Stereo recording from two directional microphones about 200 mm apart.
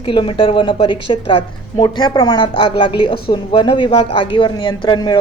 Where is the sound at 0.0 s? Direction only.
25° left (ahead or behind).